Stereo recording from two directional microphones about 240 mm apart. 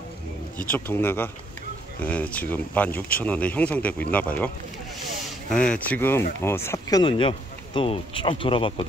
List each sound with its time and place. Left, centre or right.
0.7 s speech: centre
5.5 s speech: centre; by 8.8 s left